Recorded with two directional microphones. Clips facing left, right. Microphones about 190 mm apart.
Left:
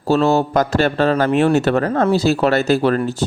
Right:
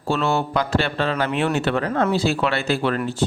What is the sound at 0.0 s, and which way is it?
A man's voice, 40° left (ahead or behind).